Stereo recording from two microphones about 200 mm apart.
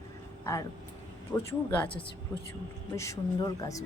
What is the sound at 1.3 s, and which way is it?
Speech, 15° left (ahead or behind).